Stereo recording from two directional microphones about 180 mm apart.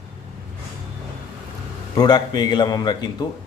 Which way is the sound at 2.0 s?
20° left (ahead or behind).